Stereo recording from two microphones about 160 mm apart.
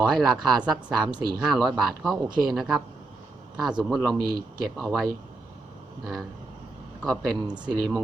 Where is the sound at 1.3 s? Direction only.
Centre (ahead or behind).